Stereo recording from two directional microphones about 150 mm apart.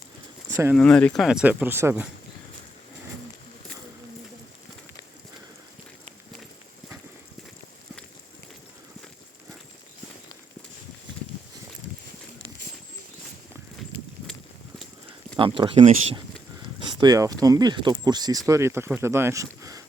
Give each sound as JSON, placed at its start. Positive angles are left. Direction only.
{"t": 0.8, "sound": "speech", "side_deg": 5}
{"t": 15.4, "sound": "speech", "side_deg": -35}